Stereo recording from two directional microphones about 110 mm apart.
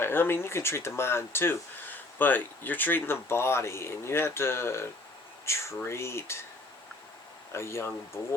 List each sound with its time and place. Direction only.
0.0 s speech: 20° left (ahead or behind)
7.5 s speech: 25° left (ahead or behind)